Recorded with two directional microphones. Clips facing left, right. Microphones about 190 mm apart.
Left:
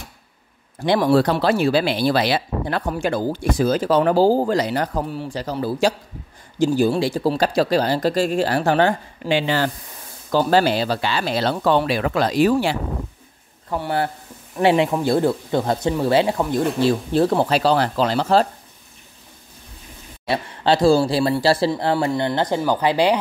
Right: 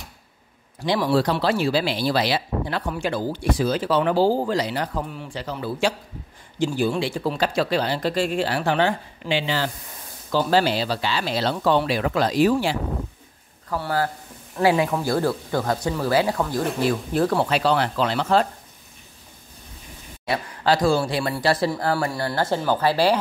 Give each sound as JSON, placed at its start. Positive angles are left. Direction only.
{"t": 0.7, "sound": "speech", "side_deg": 50}
{"t": 13.7, "sound": "speech", "side_deg": 20}
{"t": 20.2, "sound": "speech", "side_deg": 25}